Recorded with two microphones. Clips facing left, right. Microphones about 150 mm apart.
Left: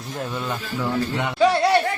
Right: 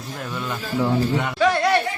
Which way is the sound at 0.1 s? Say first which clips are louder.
Left 2 dB; 30° left (ahead or behind).